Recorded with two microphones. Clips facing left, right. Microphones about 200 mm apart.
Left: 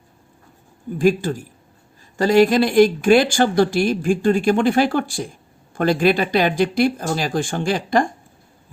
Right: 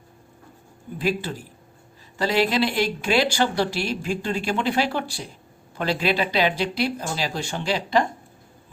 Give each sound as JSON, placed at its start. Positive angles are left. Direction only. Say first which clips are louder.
{"t": 0.9, "sound": "speech", "louder": "left 8 dB", "side_deg": 45}